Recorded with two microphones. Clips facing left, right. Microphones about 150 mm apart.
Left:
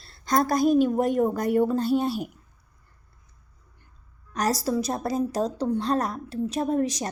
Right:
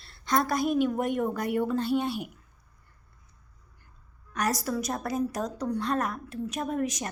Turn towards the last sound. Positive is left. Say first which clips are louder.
# left 5 dB
turn(degrees=35)  # may be behind; listen again after turning